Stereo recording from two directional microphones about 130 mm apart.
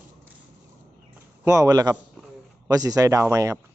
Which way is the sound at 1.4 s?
25° right (ahead or behind).